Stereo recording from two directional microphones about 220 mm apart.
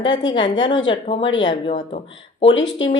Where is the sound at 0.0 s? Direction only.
20° left (ahead or behind).